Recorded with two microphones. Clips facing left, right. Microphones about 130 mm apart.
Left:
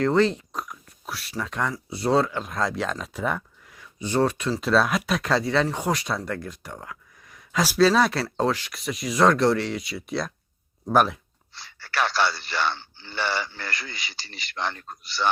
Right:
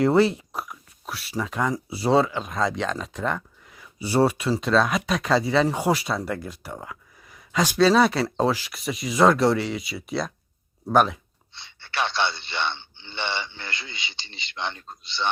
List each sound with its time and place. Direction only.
0.0 s speech: 10° right (ahead or behind)
4.6 s speech: centre (ahead or behind)
11.8 s a sound: 40° left (ahead or behind)
12.3 s a man's voice: 25° right (ahead or behind)
12.5 s a man's voice: 40° left (ahead or behind)
14.1 s a man's voice: 25° right (ahead or behind)
14.5 s a man's voice: 40° left (ahead or behind)